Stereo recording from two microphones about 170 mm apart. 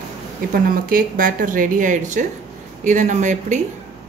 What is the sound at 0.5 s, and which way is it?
A woman's voice, 60° right (ahead or behind).